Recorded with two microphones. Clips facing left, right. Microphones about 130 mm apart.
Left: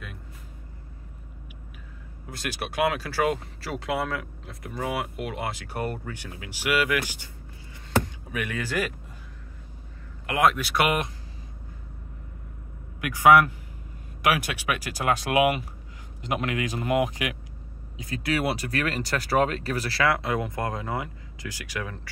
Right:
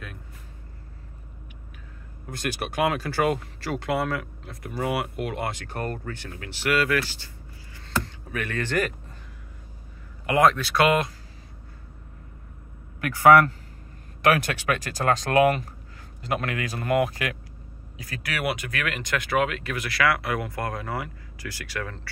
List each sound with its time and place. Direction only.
2.2 s speech: centre (ahead or behind)
10.2 s speech: centre (ahead or behind)
10.5 s speech: 15° left (ahead or behind)
13.0 s speech: 15° left (ahead or behind)